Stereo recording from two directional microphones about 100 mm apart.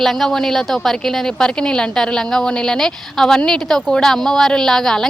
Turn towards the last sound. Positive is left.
turn(degrees=5)  # may be behind; listen again after turning